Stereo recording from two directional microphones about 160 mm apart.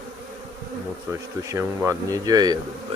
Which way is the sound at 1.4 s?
20° right (ahead or behind).